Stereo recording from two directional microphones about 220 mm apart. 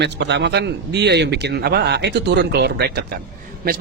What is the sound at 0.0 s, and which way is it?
Speech, 50° right (ahead or behind).